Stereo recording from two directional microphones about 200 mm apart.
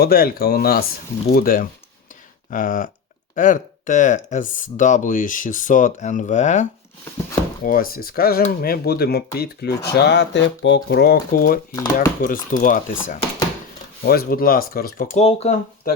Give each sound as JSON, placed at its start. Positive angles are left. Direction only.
{"t": 0.0, "sound": "speech", "side_deg": 50}
{"t": 14.0, "sound": "speech", "side_deg": 50}
{"t": 15.2, "sound": "speech", "side_deg": 30}